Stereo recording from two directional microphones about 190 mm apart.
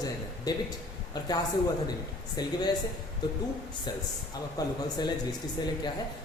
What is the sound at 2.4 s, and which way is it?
Speech, 20° left (ahead or behind).